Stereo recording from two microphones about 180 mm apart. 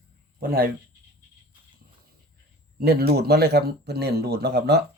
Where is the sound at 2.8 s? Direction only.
60° right (ahead or behind).